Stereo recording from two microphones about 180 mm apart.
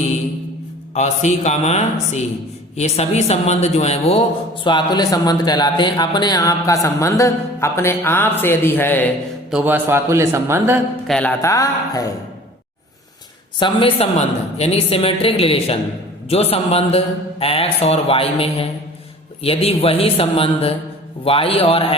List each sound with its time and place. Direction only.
0.9 s a woman's voice: 40° left (ahead or behind)
4.6 s a man's voice: 25° left (ahead or behind)
9.5 s a man's voice: 10° right (ahead or behind)
11.0 s a man's voice: 5° left (ahead or behind)
13.6 s a woman's voice: 30° left (ahead or behind)